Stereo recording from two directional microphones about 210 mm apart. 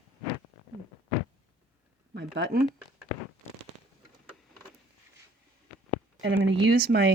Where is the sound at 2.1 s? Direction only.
50° right (ahead or behind).